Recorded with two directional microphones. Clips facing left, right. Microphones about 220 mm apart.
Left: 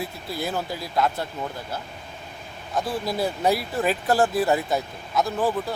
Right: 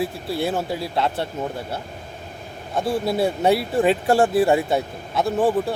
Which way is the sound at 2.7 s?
25° right (ahead or behind).